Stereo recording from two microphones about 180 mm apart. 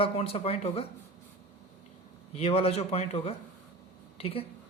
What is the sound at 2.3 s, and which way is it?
A man's voice, 30° left (ahead or behind).